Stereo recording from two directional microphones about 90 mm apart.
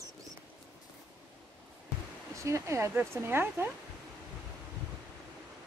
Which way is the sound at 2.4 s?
35° right (ahead or behind).